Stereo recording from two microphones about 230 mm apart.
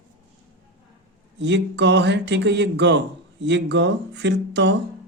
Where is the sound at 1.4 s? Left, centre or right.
Right.